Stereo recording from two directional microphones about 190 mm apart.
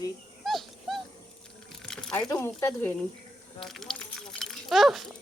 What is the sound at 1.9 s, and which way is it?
Speech, 5° left (ahead or behind).